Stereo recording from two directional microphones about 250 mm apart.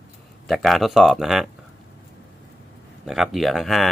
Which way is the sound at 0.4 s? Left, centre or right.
Centre.